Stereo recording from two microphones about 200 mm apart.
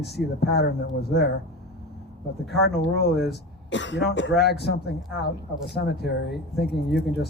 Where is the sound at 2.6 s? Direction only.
55° left (ahead or behind).